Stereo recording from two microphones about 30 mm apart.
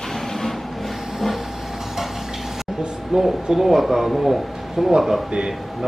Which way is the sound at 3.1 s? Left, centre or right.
Right.